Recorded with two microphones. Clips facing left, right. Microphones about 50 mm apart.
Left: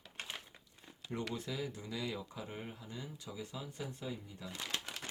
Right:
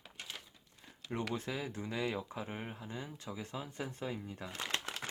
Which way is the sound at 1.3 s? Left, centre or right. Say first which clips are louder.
Right 2 dB; right.